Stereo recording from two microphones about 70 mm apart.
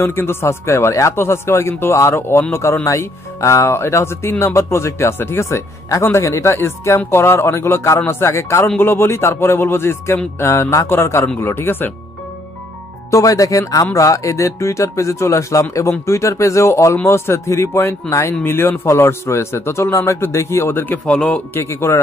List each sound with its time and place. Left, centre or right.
0.0 s speech: left
13.1 s speech: left
21.0 s a man's voice: centre
21.5 s speech: left